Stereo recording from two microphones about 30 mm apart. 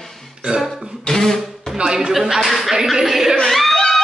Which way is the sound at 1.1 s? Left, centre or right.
Centre.